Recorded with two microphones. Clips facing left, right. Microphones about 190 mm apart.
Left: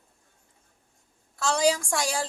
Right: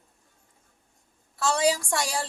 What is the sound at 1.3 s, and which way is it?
Speech, centre (ahead or behind).